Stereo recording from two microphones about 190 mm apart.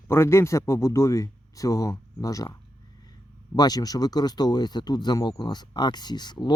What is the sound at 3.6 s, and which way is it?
Speech, 20° left (ahead or behind).